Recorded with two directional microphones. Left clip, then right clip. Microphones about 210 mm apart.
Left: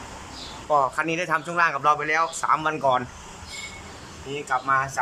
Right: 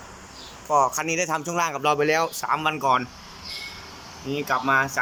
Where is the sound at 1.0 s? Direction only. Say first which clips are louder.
Even; 15° right (ahead or behind).